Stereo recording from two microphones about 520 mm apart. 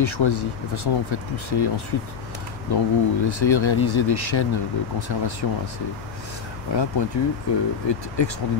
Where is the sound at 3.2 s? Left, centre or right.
Left.